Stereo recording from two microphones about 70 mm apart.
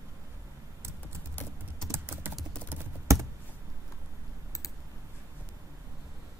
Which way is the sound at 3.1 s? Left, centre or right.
Right.